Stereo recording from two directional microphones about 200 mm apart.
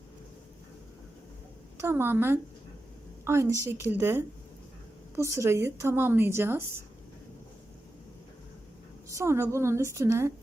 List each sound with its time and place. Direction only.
1.8 s a woman's voice: 10° right (ahead or behind)
9.0 s a woman's voice: 15° right (ahead or behind)